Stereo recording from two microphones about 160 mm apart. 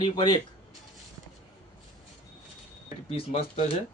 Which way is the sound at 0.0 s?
30° left (ahead or behind).